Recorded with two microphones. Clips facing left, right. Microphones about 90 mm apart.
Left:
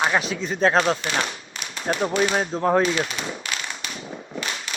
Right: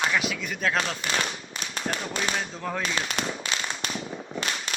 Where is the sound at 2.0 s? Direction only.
45° left (ahead or behind).